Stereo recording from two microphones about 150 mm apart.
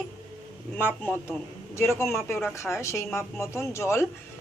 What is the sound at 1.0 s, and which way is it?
A man's voice, 15° left (ahead or behind).